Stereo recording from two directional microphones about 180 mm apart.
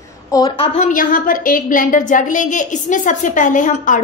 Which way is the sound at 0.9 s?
50° left (ahead or behind).